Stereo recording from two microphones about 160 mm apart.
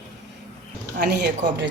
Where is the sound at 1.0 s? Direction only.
90° right.